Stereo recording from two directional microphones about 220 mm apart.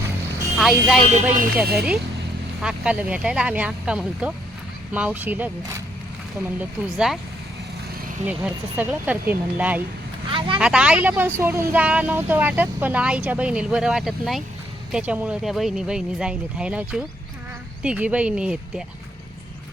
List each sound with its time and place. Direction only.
0.6 s speech: centre (ahead or behind)
8.3 s speech: 5° right (ahead or behind)
10.3 s speech: 25° right (ahead or behind)
10.6 s speech: 5° right (ahead or behind)